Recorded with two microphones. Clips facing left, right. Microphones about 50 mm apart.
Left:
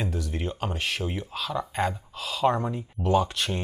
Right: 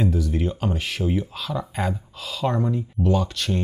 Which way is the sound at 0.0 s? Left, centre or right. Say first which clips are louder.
Right 7 dB; centre.